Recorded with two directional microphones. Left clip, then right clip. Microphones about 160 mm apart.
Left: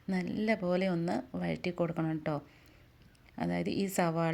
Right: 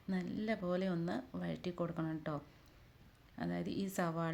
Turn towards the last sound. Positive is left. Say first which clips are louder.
# left 8 dB
turn(degrees=25)  # may be behind; listen again after turning